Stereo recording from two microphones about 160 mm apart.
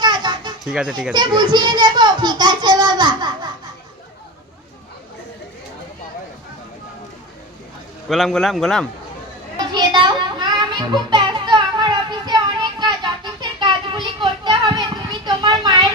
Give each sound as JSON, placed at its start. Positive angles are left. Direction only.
{"t": 0.0, "sound": "children playing", "side_deg": -30}
{"t": 0.6, "sound": "a man's voice", "side_deg": -5}
{"t": 1.1, "sound": "a child's voice", "side_deg": -30}
{"t": 8.1, "sound": "a man's voice", "side_deg": 0}
{"t": 9.7, "sound": "a sound", "side_deg": -30}